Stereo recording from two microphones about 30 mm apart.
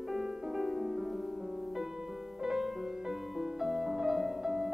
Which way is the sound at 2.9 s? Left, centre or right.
Centre.